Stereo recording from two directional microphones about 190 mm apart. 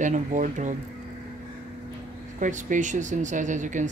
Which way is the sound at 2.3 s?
40° right (ahead or behind).